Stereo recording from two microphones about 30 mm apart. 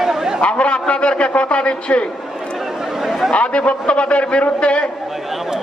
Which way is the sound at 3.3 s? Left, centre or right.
Left.